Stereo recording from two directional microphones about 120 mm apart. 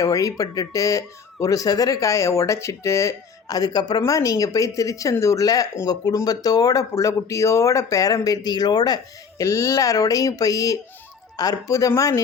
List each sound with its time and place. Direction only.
0.0 s speech: 30° left (ahead or behind)